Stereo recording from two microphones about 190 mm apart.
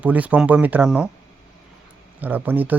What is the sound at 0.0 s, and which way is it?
Speech, 10° right (ahead or behind).